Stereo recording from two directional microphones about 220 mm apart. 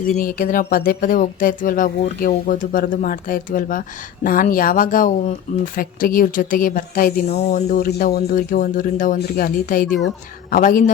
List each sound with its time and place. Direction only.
0.2 s speech: 40° left (ahead or behind)
7.9 s speech: 45° left (ahead or behind)